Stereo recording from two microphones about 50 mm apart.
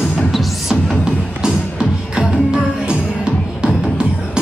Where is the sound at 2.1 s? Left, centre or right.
Centre.